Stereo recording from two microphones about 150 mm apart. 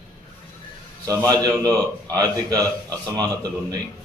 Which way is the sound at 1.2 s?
25° right (ahead or behind).